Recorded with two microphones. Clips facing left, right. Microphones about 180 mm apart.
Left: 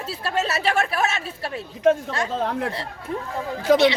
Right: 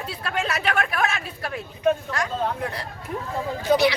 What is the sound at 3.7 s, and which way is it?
Speech, 90° left.